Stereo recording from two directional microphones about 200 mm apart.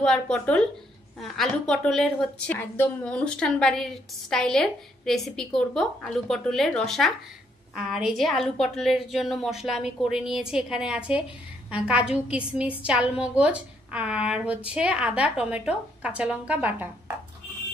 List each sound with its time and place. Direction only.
0.0 s a woman's voice: 5° left (ahead or behind)